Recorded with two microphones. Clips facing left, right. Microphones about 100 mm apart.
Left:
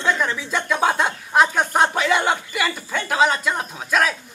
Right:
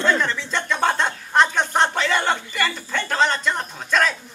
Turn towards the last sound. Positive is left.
turn(degrees=5)  # may be behind; listen again after turning